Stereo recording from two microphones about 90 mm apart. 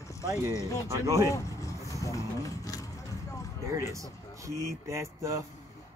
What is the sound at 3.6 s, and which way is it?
Speech, 35° right (ahead or behind).